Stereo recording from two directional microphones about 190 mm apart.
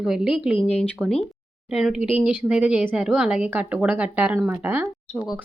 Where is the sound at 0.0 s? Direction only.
Centre (ahead or behind).